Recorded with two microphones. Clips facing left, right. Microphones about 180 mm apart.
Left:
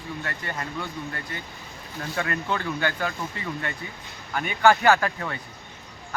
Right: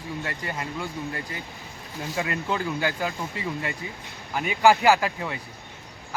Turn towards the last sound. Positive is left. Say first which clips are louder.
# even
turn(degrees=-10)  # may be behind; listen again after turning